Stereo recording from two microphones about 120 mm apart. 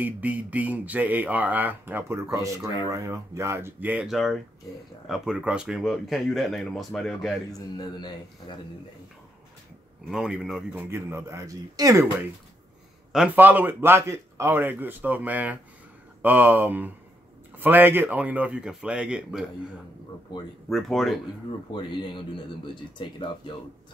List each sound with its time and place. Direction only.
0.0 s speech: 15° right (ahead or behind)
4.1 s speech: centre (ahead or behind)
7.5 s a man's voice: 35° left (ahead or behind)
10.0 s speech: 5° right (ahead or behind)
10.9 s speech: 20° right (ahead or behind)
13.1 s speech: 5° right (ahead or behind)
13.4 s speech: 15° right (ahead or behind)
20.7 s speech: centre (ahead or behind)
21.7 s speech: 45° left (ahead or behind)